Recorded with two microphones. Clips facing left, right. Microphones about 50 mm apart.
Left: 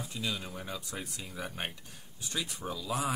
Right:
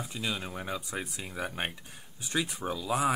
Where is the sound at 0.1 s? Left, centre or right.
Right.